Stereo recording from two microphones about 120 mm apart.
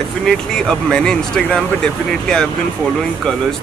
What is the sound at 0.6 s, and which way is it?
Speech, 5° left (ahead or behind).